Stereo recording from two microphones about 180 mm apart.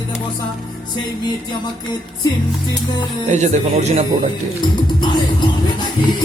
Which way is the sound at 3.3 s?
40° right (ahead or behind).